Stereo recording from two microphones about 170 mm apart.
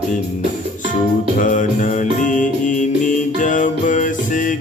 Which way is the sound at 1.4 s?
50° left (ahead or behind).